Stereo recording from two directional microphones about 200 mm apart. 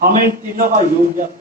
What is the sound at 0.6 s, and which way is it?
Speech, 40° right (ahead or behind).